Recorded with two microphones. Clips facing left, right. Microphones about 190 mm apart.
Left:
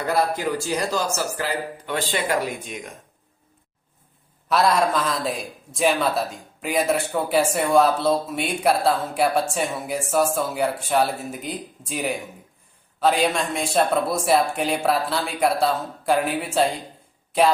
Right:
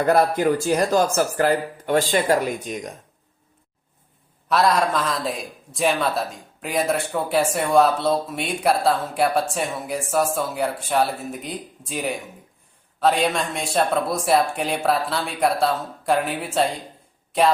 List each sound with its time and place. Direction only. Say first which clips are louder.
0.0 s speech: right 5 dB; 50° right (ahead or behind)
4.4 s a man's voice: even; centre (ahead or behind)